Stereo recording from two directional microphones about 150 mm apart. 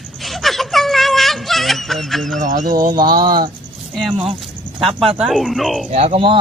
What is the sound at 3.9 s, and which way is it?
Speech, centre (ahead or behind).